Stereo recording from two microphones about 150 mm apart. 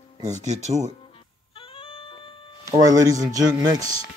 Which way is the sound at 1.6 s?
35° left (ahead or behind).